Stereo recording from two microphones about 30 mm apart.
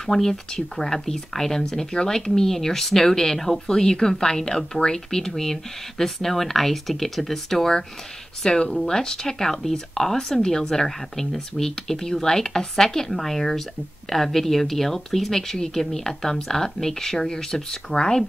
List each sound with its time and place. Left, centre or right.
0.0 s speech: centre
3.6 s speech: left
8.5 s speech: left